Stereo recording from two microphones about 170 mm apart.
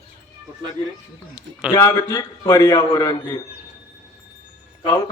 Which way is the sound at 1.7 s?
15° left (ahead or behind).